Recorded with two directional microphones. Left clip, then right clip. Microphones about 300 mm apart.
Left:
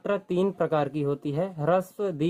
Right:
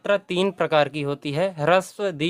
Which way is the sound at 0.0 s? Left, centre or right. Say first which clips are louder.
Right 5 dB; centre.